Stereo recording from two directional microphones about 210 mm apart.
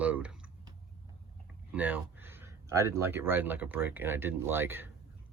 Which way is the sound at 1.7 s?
10° right (ahead or behind).